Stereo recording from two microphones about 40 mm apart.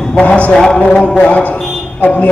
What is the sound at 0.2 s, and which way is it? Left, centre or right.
A man's voice, left.